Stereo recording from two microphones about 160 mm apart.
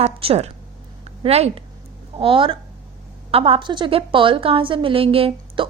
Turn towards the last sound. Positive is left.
turn(degrees=-35)  # may be behind; listen again after turning